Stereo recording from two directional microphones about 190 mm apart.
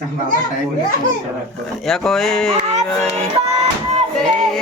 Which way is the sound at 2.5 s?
35° right (ahead or behind).